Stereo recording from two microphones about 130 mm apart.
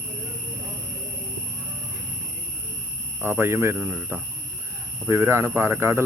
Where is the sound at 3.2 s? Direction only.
15° right (ahead or behind).